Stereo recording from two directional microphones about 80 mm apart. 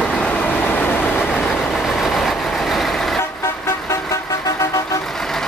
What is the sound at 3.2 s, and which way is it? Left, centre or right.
Vehicle, left.